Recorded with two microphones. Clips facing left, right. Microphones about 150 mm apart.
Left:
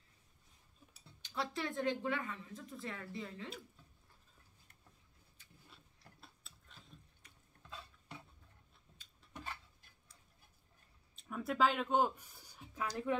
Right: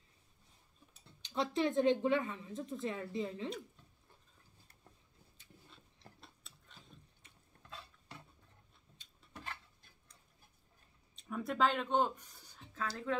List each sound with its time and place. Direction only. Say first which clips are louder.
1.2 s a woman's voice: right 6 dB; 20° right (ahead or behind)
6.2 s tick-tock: right 1 dB; centre (ahead or behind)
11.1 s speech: even; centre (ahead or behind)